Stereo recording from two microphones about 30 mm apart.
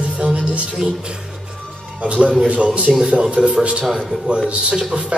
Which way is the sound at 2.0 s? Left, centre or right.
Right.